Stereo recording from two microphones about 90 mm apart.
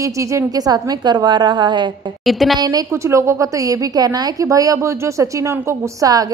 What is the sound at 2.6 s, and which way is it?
Speech, 50° right (ahead or behind).